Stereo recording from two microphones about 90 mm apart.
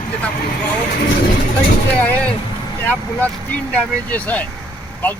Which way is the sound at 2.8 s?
20° left (ahead or behind).